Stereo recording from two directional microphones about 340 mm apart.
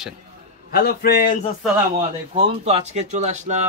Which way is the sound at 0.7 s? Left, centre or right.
Left.